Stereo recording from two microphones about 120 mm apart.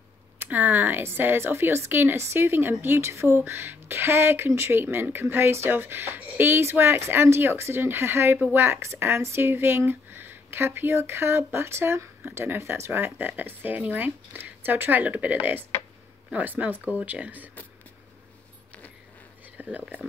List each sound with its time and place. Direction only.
0.4 s speech: 15° right (ahead or behind)
19.5 s speech: 15° right (ahead or behind)